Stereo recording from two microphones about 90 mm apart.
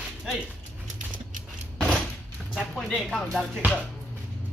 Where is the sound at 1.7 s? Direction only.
10° left (ahead or behind).